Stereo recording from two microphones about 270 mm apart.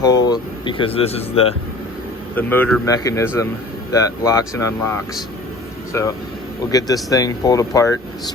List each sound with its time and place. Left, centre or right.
0.0 s speech: centre
2.3 s speech: centre
5.9 s speech: centre